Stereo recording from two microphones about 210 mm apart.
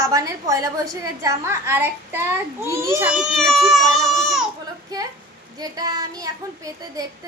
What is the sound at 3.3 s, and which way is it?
A child's voice, centre (ahead or behind).